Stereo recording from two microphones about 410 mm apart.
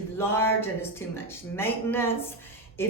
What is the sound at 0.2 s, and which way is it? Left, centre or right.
Speech, centre.